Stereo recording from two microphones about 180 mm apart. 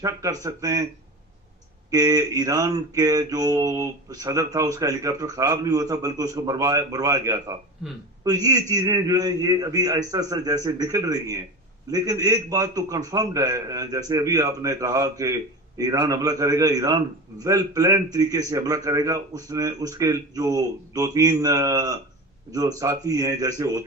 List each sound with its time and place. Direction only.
0.0 s a man's voice: 20° right (ahead or behind)
1.9 s a man's voice: 20° right (ahead or behind)